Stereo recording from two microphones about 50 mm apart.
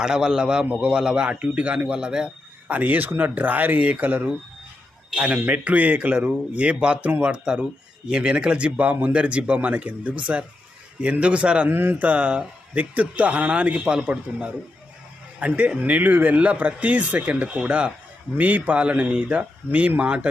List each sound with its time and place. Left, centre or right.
0.0 s a man's voice: centre
2.6 s speech: right
11.7 s speech: right
18.3 s speech: right